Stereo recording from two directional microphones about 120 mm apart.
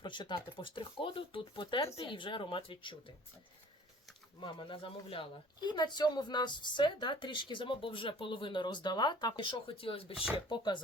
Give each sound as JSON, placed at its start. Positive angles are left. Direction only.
{"t": 0.0, "sound": "speech", "side_deg": 40}
{"t": 4.4, "sound": "speech", "side_deg": 45}
{"t": 10.3, "sound": "speech", "side_deg": 40}